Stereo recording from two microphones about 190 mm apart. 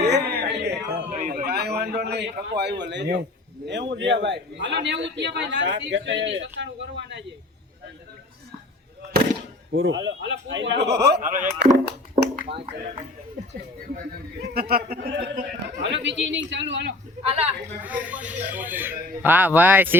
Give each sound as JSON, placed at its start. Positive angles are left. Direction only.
{"t": 0.0, "sound": "a sound", "side_deg": -60}
{"t": 1.1, "sound": "a sound", "side_deg": -35}
{"t": 1.5, "sound": "a man's voice", "side_deg": -60}
{"t": 9.7, "sound": "a man's voice", "side_deg": -85}
{"t": 11.2, "sound": "speech", "side_deg": -45}
{"t": 11.6, "sound": "speech", "side_deg": -60}
{"t": 14.5, "sound": "speech", "side_deg": -55}
{"t": 15.9, "sound": "a man's voice", "side_deg": -70}
{"t": 17.2, "sound": "a man's voice", "side_deg": -30}
{"t": 17.8, "sound": "speech", "side_deg": -5}